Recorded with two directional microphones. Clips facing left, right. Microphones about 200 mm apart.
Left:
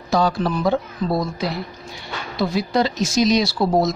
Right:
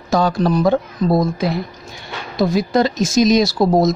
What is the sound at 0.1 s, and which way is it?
Speech, 45° right (ahead or behind).